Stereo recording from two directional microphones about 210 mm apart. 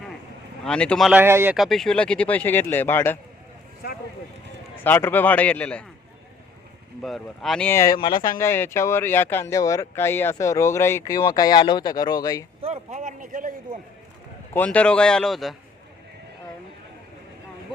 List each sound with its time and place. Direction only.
0.6 s speech: 5° left (ahead or behind); by 1.5 s 10° right (ahead or behind)
1.5 s speech: centre (ahead or behind)
3.8 s speech: 45° left (ahead or behind)
4.8 s speech: 10° left (ahead or behind)
7.0 s speech: centre (ahead or behind); by 8.2 s 20° left (ahead or behind)
8.4 s speech: 10° left (ahead or behind)
12.6 s speech: 35° right (ahead or behind)
14.5 s speech: 5° left (ahead or behind)